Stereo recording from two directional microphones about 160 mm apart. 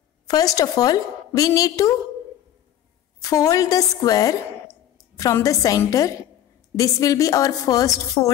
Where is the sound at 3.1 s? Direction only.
20° left (ahead or behind).